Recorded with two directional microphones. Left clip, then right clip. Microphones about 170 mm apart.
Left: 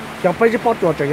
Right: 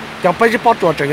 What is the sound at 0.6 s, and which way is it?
Speech, 25° right (ahead or behind).